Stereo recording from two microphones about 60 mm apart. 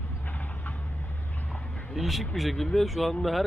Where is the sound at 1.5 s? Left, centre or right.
Left.